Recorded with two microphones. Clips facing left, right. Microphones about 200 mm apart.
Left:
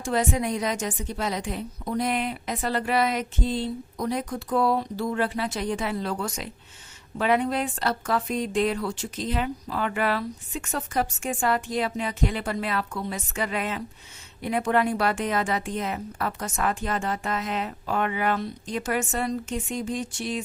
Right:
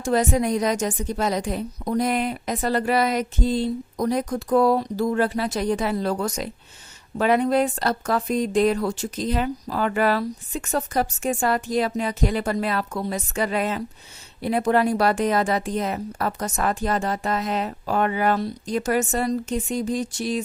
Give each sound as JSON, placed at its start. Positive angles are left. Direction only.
{"t": 0.0, "sound": "a woman's voice", "side_deg": -40}